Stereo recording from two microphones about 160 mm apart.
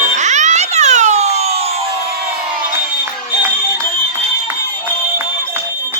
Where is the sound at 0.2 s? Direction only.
45° right (ahead or behind).